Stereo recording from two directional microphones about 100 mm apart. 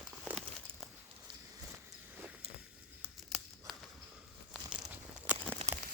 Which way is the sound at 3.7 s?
Centre (ahead or behind).